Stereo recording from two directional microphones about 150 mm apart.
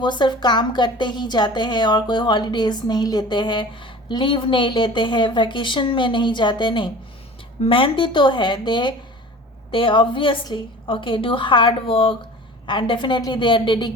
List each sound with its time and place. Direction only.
0.0 s a woman's voice: 30° left (ahead or behind)